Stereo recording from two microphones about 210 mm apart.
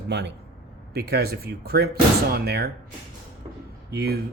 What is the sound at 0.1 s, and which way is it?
Speech, 55° right (ahead or behind).